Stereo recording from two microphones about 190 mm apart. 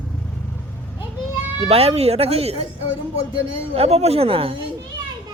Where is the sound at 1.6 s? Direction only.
30° right (ahead or behind).